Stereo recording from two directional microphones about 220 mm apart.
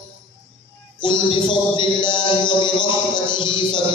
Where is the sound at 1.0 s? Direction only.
20° left (ahead or behind).